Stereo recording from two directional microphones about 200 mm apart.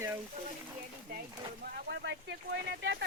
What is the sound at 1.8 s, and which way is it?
Speech, 60° right (ahead or behind).